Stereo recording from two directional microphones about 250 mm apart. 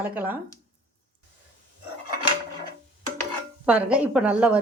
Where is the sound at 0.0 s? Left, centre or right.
Centre.